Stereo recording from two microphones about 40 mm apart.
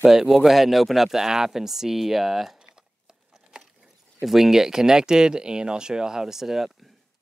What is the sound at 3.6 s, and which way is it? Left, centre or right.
Speech, centre.